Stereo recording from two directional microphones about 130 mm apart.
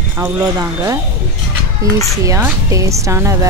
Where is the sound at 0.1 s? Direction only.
20° right (ahead or behind).